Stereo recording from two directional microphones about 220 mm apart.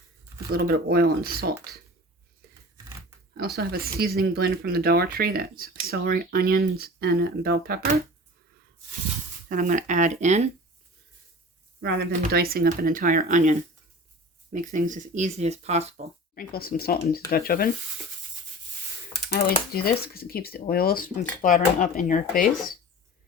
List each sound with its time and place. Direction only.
0.5 s speech: 45° right (ahead or behind)
2.4 s a sound: 45° right (ahead or behind)
3.3 s speech: 45° right (ahead or behind)
9.5 s speech: 35° right (ahead or behind)
11.8 s speech: 45° right (ahead or behind); by 16.0 s 30° right (ahead or behind)
16.3 s speech: 40° left (ahead or behind)
19.3 s speech: 45° left (ahead or behind)